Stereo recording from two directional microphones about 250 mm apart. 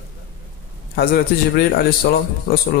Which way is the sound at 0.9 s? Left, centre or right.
Left.